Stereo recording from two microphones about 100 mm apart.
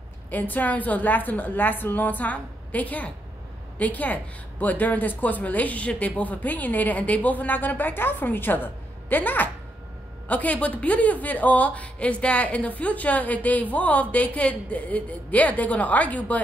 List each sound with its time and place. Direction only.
0.3 s speech: 15° left (ahead or behind)